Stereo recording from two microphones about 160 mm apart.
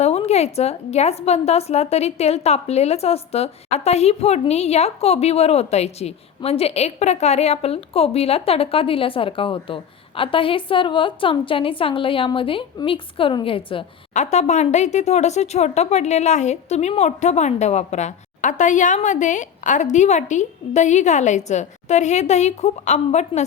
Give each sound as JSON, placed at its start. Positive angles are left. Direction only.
{"t": 0.0, "sound": "a woman's voice", "side_deg": 40}
{"t": 14.1, "sound": "speech", "side_deg": 45}